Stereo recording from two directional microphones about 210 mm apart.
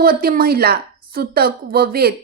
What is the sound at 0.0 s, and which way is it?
A woman's voice, 45° right (ahead or behind).